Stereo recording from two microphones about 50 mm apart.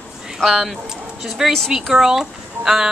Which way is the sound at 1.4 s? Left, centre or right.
Centre.